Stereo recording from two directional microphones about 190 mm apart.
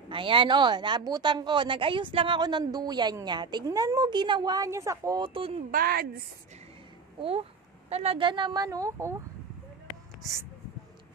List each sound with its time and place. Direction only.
0.1 s a woman's voice: 25° right (ahead or behind)
5.7 s speech: 50° right (ahead or behind)
7.2 s a woman's voice: 30° right (ahead or behind); by 9.2 s 15° right (ahead or behind)